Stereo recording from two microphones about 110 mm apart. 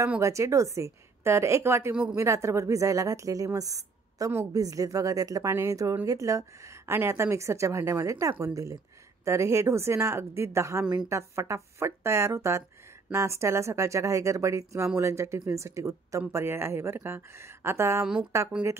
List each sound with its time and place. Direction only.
0.2 s a woman's voice: 30° right (ahead or behind)